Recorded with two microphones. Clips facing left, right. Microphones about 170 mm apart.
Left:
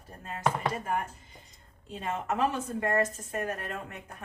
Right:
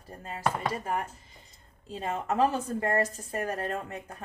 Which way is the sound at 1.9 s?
35° right (ahead or behind).